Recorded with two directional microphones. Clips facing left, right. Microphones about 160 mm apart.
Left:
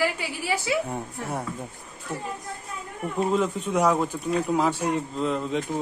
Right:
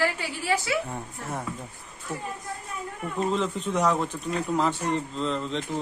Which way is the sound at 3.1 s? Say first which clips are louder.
Left 3 dB; 5° left (ahead or behind).